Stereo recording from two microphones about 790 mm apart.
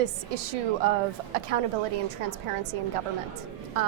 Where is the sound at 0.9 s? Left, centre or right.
Right.